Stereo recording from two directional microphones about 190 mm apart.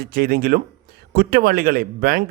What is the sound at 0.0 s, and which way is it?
Speech, 50° right (ahead or behind).